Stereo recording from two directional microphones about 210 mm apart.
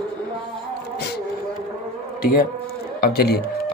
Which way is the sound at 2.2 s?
45° left (ahead or behind).